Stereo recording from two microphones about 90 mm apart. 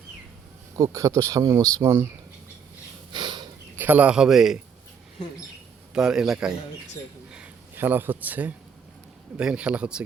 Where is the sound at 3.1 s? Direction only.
60° right (ahead or behind).